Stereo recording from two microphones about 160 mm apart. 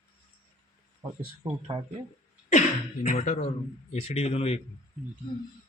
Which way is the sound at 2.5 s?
45° left (ahead or behind).